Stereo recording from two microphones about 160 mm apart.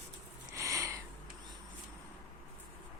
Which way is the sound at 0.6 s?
20° right (ahead or behind).